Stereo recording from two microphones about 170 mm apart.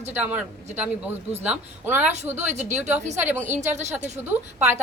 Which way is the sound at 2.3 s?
40° right (ahead or behind).